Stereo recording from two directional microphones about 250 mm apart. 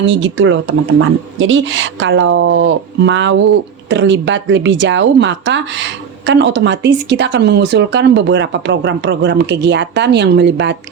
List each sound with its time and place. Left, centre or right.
0.0 s speech: right